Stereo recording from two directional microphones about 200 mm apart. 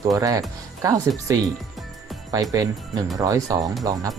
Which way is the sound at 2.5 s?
20° right (ahead or behind).